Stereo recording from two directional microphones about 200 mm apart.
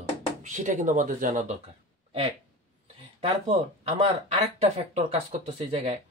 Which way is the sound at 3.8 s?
30° right (ahead or behind).